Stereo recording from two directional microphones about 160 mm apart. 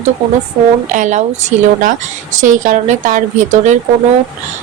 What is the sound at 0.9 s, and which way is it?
Speech, 50° right (ahead or behind).